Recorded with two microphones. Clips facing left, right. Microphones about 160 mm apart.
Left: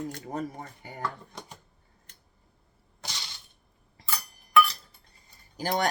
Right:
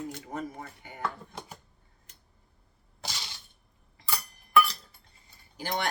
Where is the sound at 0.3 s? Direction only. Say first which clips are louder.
Left 3 dB; 35° left (ahead or behind).